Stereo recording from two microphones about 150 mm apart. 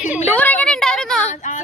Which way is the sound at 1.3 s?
55° left (ahead or behind).